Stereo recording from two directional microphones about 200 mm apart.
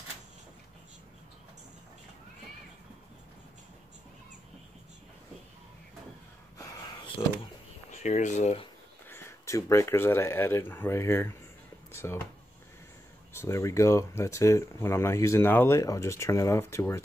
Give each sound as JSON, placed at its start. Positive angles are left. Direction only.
{"t": 6.6, "sound": "a sound", "side_deg": 25}
{"t": 8.0, "sound": "speech", "side_deg": 35}
{"t": 9.1, "sound": "speech", "side_deg": 15}
{"t": 13.3, "sound": "speech", "side_deg": 15}